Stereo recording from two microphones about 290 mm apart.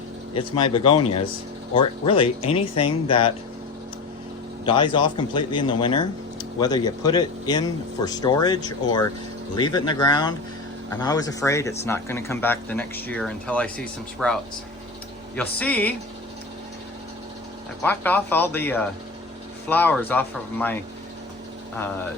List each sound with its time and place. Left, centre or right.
0.3 s a man's voice: centre
4.6 s a man's voice: centre
15.4 s speech: centre
17.8 s a man's voice: centre